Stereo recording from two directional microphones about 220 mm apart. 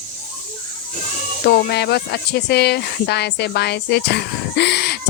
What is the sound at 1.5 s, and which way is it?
Speech, 50° left (ahead or behind).